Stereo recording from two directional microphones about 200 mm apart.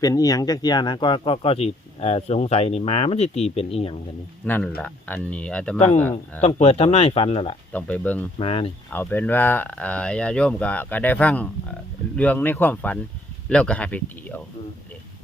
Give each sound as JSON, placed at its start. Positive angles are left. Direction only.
{"t": 0.0, "sound": "speech", "side_deg": 20}
{"t": 4.4, "sound": "speech", "side_deg": 10}
{"t": 6.6, "sound": "speech", "side_deg": 30}
{"t": 7.7, "sound": "speech", "side_deg": 5}
{"t": 8.4, "sound": "speech", "side_deg": 25}
{"t": 8.9, "sound": "speech", "side_deg": 10}